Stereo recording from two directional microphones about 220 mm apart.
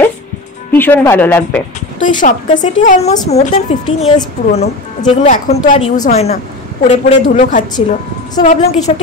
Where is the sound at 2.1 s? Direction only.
35° left (ahead or behind).